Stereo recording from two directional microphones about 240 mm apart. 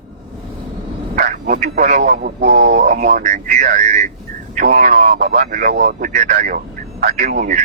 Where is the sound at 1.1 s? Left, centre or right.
Right.